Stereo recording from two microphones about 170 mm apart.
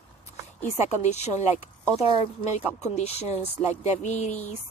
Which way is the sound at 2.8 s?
40° left (ahead or behind).